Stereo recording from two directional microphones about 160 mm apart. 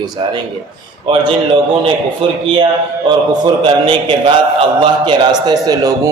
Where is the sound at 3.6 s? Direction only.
30° right (ahead or behind).